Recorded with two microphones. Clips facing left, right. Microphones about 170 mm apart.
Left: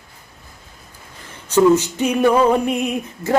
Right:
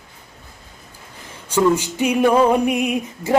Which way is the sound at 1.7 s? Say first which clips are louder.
Left 2 dB; 10° right (ahead or behind).